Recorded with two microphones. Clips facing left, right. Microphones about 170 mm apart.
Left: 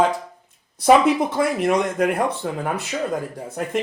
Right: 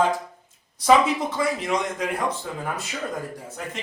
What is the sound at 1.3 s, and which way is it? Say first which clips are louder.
Speech: left 5 dB; 55° left (ahead or behind).